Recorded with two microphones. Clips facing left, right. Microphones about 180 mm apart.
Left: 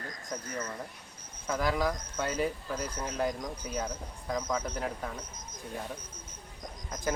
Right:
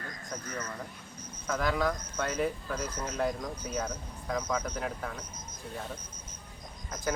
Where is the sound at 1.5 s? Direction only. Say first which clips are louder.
Even; 10° left (ahead or behind).